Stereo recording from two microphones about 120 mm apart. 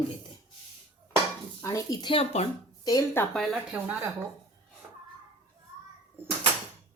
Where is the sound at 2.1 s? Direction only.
55° left (ahead or behind).